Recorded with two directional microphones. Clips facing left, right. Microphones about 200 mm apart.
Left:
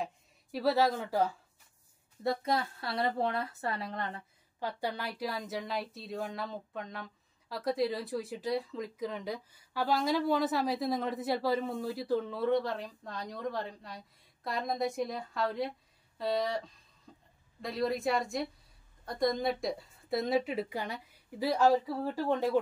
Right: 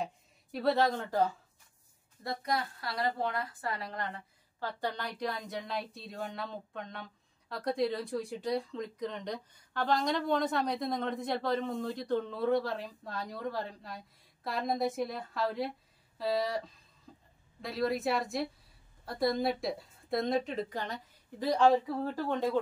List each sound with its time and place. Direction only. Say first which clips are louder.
0.0 s speech: even; centre (ahead or behind)
2.2 s a woman's voice: left 3 dB; 25° left (ahead or behind)
4.6 s speech: left 1 dB; 10° left (ahead or behind)
17.1 s a sound: right 1 dB; centre (ahead or behind)
17.6 s speech: even; centre (ahead or behind)